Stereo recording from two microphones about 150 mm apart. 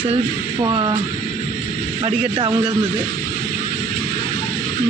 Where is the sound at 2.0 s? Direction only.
35° right (ahead or behind).